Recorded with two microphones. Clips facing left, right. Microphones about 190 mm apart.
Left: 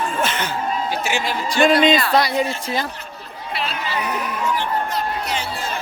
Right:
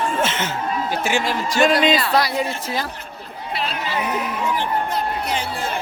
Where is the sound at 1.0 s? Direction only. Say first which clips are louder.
Right 2 dB; 50° right (ahead or behind).